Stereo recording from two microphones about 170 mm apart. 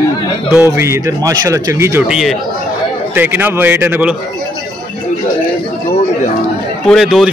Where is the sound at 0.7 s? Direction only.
15° right (ahead or behind).